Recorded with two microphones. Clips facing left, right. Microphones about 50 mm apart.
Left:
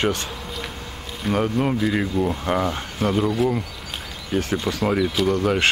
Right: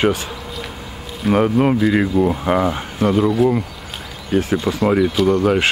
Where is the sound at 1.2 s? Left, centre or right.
Centre.